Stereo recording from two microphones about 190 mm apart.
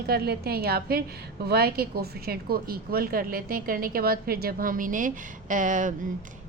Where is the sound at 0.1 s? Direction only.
55° right (ahead or behind).